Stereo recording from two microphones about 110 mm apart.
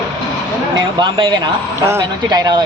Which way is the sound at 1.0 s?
45° right (ahead or behind).